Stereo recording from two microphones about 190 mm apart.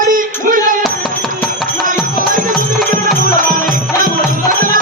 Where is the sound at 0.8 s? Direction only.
Centre (ahead or behind).